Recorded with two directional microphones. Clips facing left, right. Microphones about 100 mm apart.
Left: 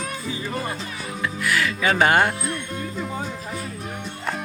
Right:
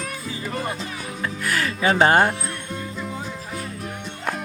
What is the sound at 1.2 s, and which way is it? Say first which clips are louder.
Music: left 2 dB; 40° right (ahead or behind).